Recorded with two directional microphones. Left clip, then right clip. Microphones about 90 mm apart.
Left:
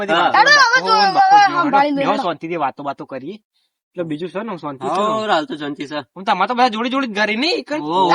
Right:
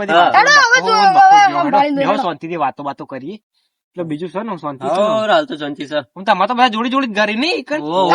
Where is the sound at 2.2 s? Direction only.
45° left (ahead or behind).